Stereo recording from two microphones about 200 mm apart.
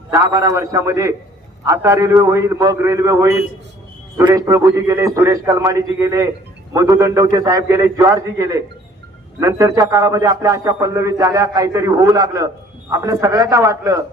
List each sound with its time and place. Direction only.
0.1 s a man's voice: 15° right (ahead or behind)